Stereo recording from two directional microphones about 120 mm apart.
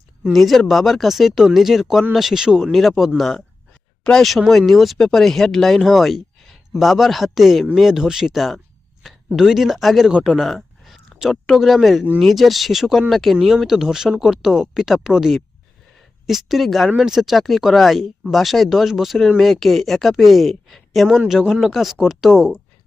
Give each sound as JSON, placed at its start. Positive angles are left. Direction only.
{"t": 0.3, "sound": "speech", "side_deg": 0}